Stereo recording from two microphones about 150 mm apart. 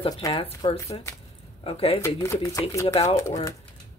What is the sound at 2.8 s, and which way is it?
Speech, 40° left (ahead or behind).